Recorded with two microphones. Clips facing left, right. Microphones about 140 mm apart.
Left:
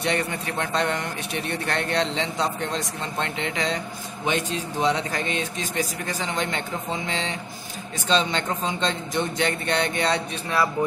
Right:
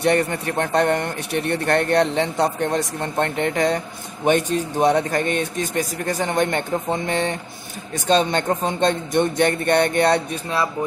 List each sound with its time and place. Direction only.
0.0 s a man's voice: 50° right (ahead or behind)